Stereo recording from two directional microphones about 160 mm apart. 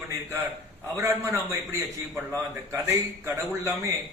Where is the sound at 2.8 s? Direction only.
15° right (ahead or behind).